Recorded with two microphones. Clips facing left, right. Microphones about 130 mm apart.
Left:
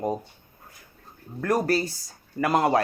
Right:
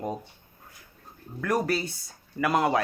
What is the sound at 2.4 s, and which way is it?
Speech, 30° left (ahead or behind).